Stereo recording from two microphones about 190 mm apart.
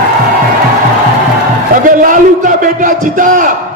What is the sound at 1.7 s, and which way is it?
A man's voice, 45° right (ahead or behind).